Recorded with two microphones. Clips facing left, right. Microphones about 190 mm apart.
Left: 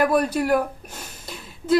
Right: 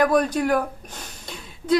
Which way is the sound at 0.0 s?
5° left (ahead or behind).